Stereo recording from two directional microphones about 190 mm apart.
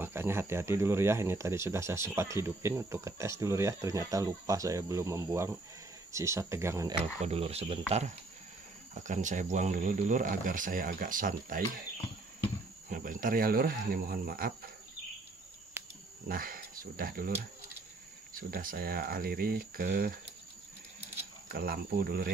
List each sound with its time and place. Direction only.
0.0 s speech: 10° right (ahead or behind)
7.2 s speech: 30° right (ahead or behind)
8.9 s speech: 40° right (ahead or behind)
12.9 s speech: 45° right (ahead or behind)
16.3 s speech: 50° right (ahead or behind)
18.3 s speech: 50° right (ahead or behind)
21.5 s speech: 55° right (ahead or behind)